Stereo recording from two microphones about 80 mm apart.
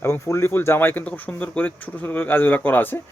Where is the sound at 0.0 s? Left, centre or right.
Left.